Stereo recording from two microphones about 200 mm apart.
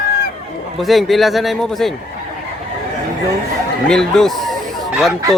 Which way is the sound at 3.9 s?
5° left (ahead or behind).